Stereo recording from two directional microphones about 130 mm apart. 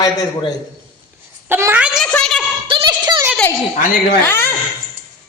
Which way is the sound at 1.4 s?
15° right (ahead or behind).